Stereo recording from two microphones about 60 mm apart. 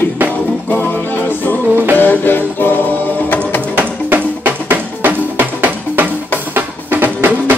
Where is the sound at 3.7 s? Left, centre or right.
Right.